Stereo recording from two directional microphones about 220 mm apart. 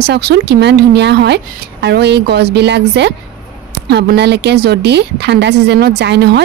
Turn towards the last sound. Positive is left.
turn(degrees=-50)  # may be behind; listen again after turning